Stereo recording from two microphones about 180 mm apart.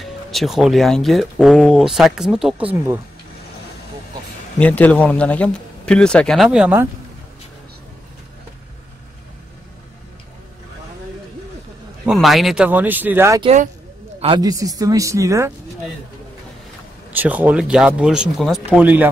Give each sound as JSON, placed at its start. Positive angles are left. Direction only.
{"t": 0.0, "sound": "speech", "side_deg": 0}
{"t": 4.6, "sound": "speech", "side_deg": 10}
{"t": 12.1, "sound": "speech", "side_deg": 0}
{"t": 13.4, "sound": "speech", "side_deg": -35}
{"t": 14.2, "sound": "speech", "side_deg": -25}
{"t": 17.1, "sound": "speech", "side_deg": -10}